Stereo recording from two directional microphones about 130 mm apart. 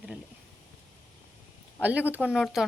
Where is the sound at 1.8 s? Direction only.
10° right (ahead or behind).